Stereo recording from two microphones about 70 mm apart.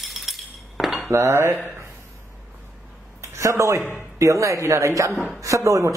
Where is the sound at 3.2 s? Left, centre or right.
Right.